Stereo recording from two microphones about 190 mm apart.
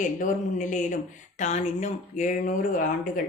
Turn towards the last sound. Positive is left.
turn(degrees=45)  # may be behind; listen again after turning